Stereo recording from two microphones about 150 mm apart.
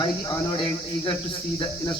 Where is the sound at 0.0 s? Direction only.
30° left (ahead or behind).